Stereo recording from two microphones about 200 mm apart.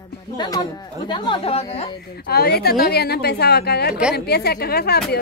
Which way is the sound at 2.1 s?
50° left (ahead or behind).